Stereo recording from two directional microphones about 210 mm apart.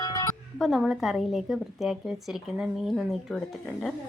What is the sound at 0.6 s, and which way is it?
A woman's voice, centre (ahead or behind).